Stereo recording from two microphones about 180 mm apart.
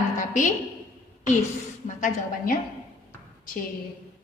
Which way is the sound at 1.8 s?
45° left (ahead or behind).